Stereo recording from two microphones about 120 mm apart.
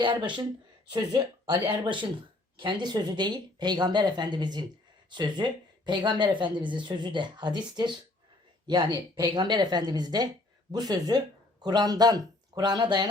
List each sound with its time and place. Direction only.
0.0 s speech: 40° right (ahead or behind)